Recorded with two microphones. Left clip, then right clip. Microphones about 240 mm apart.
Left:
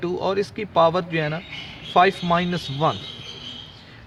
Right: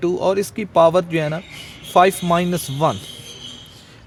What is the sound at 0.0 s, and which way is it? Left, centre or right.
Speech, right.